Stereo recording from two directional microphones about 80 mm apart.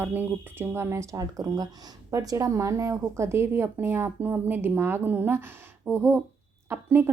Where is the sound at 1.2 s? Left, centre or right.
Right.